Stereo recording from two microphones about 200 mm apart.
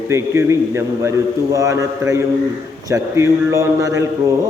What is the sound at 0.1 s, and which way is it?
A man's voice, 15° right (ahead or behind).